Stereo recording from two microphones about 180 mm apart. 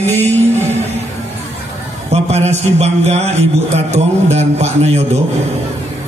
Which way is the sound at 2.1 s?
35° right (ahead or behind).